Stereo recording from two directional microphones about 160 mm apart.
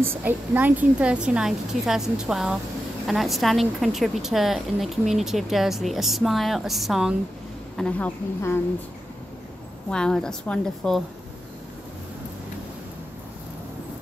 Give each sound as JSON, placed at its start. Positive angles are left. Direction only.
{"t": 0.0, "sound": "a woman's voice", "side_deg": -15}
{"t": 9.8, "sound": "a woman's voice", "side_deg": 5}